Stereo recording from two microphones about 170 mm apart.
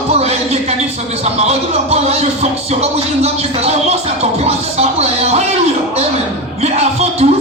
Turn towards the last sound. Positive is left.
turn(degrees=-40)  # may be behind; listen again after turning